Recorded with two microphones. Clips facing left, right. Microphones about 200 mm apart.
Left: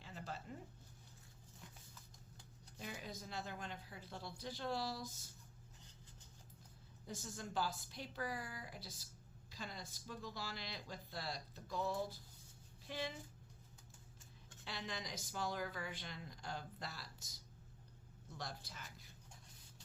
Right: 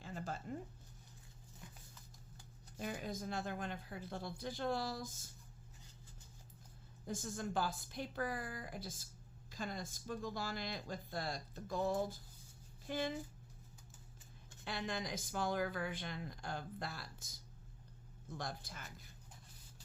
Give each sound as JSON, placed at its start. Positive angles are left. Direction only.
{"t": 0.0, "sound": "a sound", "side_deg": -45}
{"t": 2.7, "sound": "speech", "side_deg": -50}
{"t": 7.1, "sound": "speech", "side_deg": -50}
{"t": 14.6, "sound": "speech", "side_deg": -50}